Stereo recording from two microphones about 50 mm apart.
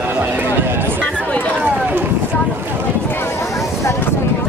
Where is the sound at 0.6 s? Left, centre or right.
Right.